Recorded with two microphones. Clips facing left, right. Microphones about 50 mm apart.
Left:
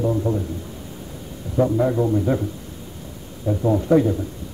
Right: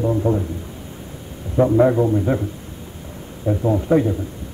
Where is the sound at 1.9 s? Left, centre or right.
Centre.